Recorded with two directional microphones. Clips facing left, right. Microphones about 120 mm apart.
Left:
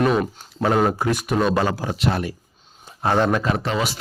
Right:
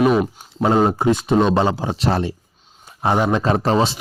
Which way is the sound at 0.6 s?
20° right (ahead or behind).